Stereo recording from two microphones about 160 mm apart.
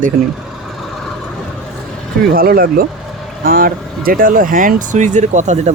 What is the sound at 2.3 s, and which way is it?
Speech, 65° right (ahead or behind).